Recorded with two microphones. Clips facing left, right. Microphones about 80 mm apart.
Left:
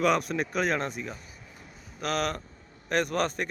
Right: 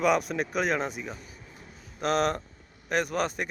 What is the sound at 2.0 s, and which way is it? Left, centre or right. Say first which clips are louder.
Speech: right 4 dB; right.